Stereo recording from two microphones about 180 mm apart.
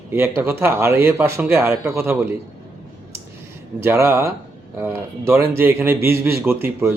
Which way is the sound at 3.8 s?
15° right (ahead or behind).